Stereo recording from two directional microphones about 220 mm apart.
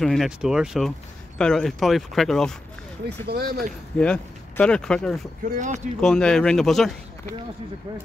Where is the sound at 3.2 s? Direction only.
45° right (ahead or behind).